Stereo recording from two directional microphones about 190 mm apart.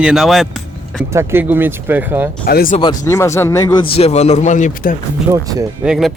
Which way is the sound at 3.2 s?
15° left (ahead or behind).